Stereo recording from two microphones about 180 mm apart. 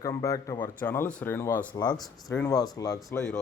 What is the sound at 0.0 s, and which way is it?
Speech, 20° left (ahead or behind).